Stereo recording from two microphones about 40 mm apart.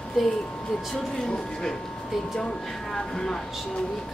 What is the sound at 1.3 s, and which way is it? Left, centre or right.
Speech, centre.